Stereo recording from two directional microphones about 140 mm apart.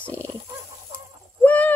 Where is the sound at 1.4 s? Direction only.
10° left (ahead or behind).